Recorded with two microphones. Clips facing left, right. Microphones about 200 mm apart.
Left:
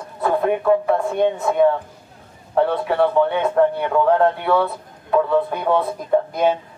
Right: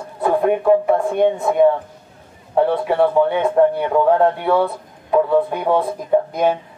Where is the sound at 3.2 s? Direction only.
15° right (ahead or behind).